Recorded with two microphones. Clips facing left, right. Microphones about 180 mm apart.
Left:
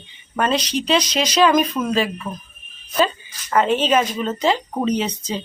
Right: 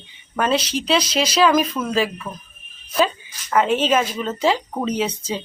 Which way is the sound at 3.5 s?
5° right (ahead or behind).